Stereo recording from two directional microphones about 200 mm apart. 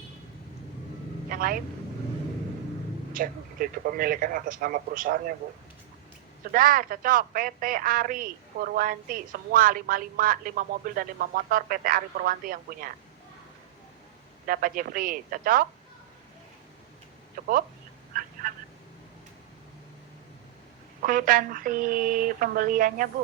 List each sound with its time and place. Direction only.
1.3 s speech: 45° right (ahead or behind)
3.1 s speech: 45° right (ahead or behind)
6.5 s speech: 45° right (ahead or behind)
14.4 s speech: 45° right (ahead or behind)
17.4 s speech: 45° right (ahead or behind)
21.0 s speech: 45° right (ahead or behind)